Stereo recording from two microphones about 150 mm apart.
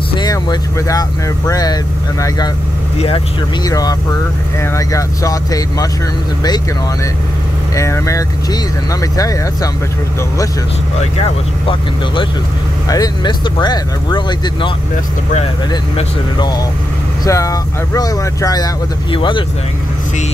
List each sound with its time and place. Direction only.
0.1 s speech: 30° left (ahead or behind)
3.6 s speech: 25° left (ahead or behind)
7.7 s speech: 20° left (ahead or behind)
11.0 s speech: 40° left (ahead or behind)
12.8 s speech: 25° left (ahead or behind)
17.2 s speech: 20° left (ahead or behind)